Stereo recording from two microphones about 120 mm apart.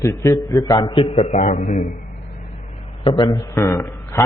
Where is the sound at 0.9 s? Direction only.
45° left (ahead or behind).